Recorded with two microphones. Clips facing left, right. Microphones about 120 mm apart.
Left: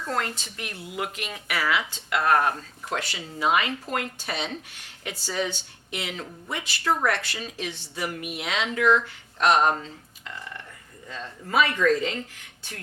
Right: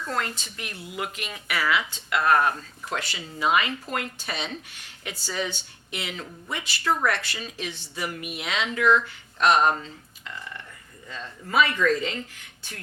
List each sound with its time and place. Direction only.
0.0 s speech: 45° left (ahead or behind)
9.7 s a sound: 40° left (ahead or behind)
11.1 s speech: 35° left (ahead or behind)
11.5 s speech: 50° left (ahead or behind)